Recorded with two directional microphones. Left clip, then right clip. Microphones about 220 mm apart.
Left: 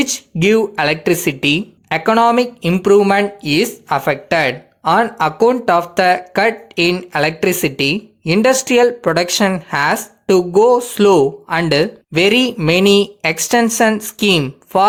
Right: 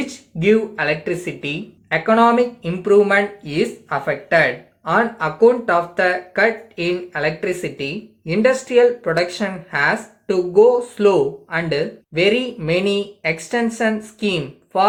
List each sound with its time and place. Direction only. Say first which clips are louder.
0.0 s speech: left 4 dB; 50° left (ahead or behind)